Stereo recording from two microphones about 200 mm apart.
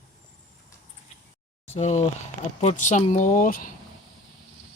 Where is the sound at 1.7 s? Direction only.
35° left (ahead or behind).